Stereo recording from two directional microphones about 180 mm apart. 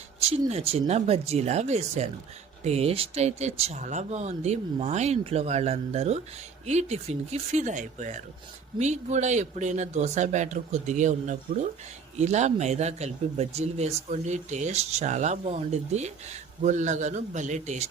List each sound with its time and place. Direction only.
0.2 s speech: 35° right (ahead or behind)